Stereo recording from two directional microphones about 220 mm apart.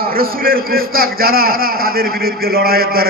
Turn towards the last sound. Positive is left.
turn(degrees=-45)  # may be behind; listen again after turning